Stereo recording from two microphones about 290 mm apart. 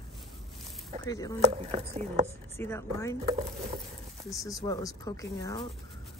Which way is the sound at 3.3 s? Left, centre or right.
Right.